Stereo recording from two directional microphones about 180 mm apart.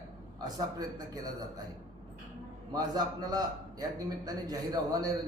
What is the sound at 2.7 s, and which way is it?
A man's voice, 20° right (ahead or behind).